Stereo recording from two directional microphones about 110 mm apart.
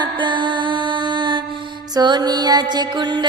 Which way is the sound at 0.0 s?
45° right (ahead or behind).